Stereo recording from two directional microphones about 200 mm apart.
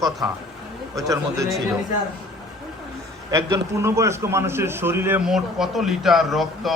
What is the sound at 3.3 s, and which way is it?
A man's voice, 15° right (ahead or behind).